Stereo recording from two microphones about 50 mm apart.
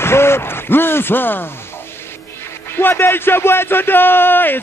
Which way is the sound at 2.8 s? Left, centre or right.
Left.